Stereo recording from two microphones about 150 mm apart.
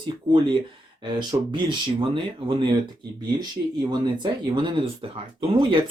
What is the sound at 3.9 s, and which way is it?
Speech, 30° right (ahead or behind).